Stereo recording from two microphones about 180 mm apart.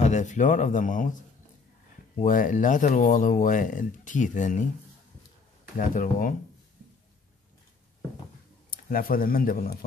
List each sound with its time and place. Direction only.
0.0 s speech: 40° left (ahead or behind)
2.1 s speech: 45° left (ahead or behind)
5.8 s speech: 50° left (ahead or behind)
8.6 s speech: 55° left (ahead or behind)